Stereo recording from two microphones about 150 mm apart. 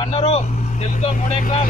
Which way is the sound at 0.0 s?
40° left (ahead or behind).